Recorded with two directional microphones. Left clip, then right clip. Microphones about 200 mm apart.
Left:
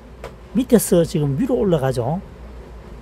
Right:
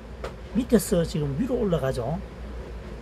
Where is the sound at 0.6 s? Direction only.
55° left (ahead or behind).